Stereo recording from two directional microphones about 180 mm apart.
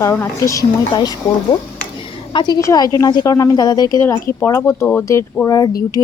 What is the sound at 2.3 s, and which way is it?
Speech, 25° left (ahead or behind).